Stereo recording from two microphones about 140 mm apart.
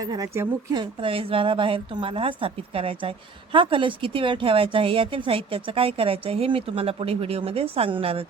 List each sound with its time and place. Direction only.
0.0 s speech: 25° right (ahead or behind); by 8.3 s 45° right (ahead or behind)